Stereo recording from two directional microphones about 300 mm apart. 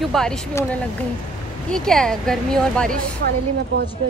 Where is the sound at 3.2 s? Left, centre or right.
Right.